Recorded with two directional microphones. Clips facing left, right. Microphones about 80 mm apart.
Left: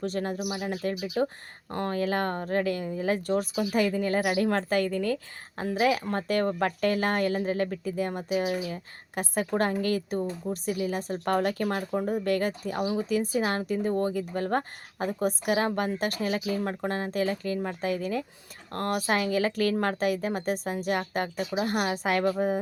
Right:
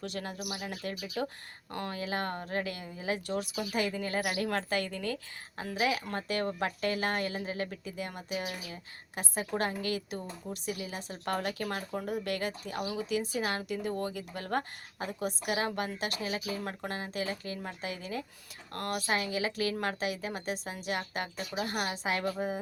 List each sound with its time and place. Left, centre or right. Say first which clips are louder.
0.0 s speech: left 8 dB; left
0.3 s speech: left 7 dB; left
1.7 s speech: left 7 dB; left
8.7 s speech: left 7 dB; left